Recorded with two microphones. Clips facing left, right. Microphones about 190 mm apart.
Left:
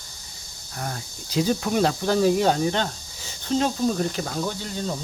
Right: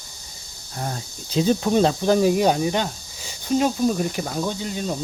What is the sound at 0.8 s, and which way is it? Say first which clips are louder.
Speech: right 3 dB; 25° right (ahead or behind).